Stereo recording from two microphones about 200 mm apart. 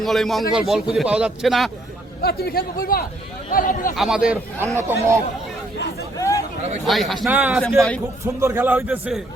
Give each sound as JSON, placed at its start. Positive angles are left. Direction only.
{"t": 0.0, "sound": "speech", "side_deg": 0}
{"t": 2.2, "sound": "a man's voice", "side_deg": 50}
{"t": 3.9, "sound": "speech", "side_deg": 0}
{"t": 6.1, "sound": "a sound", "side_deg": 15}
{"t": 6.8, "sound": "speech", "side_deg": 0}
{"t": 7.6, "sound": "speech", "side_deg": 5}
{"t": 8.2, "sound": "speech", "side_deg": -15}